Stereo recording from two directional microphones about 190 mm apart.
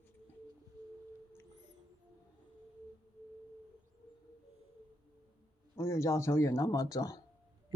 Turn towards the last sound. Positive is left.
turn(degrees=20)  # may be behind; listen again after turning